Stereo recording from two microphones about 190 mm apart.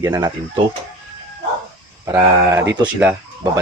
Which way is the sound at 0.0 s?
20° right (ahead or behind).